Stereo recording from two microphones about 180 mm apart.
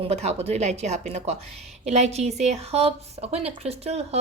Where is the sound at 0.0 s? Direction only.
35° right (ahead or behind).